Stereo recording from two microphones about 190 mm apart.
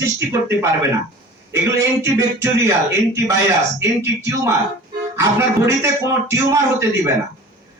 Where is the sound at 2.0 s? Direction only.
15° right (ahead or behind).